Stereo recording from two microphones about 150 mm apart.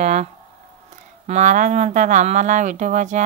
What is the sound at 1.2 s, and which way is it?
Speech, 55° right (ahead or behind).